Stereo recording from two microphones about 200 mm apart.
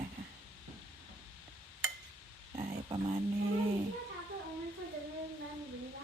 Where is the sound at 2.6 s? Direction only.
25° right (ahead or behind).